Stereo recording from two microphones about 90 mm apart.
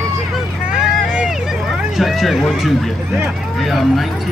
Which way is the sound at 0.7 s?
10° right (ahead or behind).